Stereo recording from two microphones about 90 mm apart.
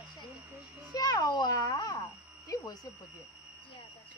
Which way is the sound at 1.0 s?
50° left (ahead or behind).